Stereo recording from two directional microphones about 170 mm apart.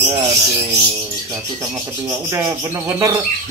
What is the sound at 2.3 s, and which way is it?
Speech, 20° right (ahead or behind).